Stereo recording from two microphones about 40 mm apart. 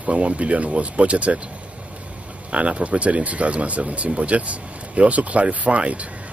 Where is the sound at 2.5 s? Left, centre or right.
Right.